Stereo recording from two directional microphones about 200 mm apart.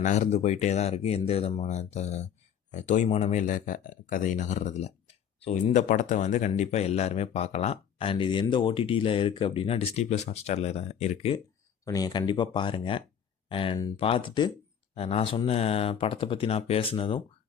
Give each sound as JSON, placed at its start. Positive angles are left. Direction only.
{"t": 0.0, "sound": "speech", "side_deg": 35}
{"t": 11.9, "sound": "speech", "side_deg": 20}